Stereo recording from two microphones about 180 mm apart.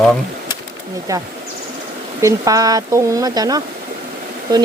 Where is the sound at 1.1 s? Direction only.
15° right (ahead or behind).